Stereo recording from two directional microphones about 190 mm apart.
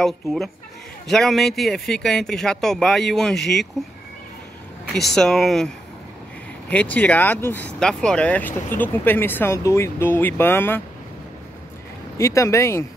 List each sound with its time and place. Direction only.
0.0 s speech: centre (ahead or behind)
4.9 s speech: centre (ahead or behind)
6.7 s speech: 10° left (ahead or behind)
12.2 s speech: 15° left (ahead or behind)